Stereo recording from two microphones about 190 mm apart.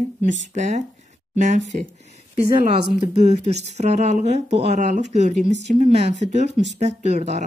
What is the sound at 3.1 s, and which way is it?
Speech, 35° right (ahead or behind).